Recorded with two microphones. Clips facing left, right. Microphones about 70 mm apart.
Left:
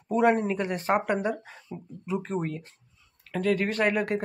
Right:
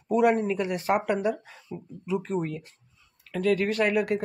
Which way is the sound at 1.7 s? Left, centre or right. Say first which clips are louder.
Right 2 dB; centre.